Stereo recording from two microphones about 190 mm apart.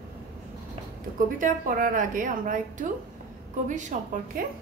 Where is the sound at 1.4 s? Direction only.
45° right (ahead or behind).